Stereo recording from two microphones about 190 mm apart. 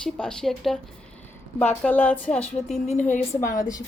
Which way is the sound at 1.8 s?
10° left (ahead or behind).